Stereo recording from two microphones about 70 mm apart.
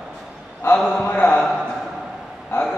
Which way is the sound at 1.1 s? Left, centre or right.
Left.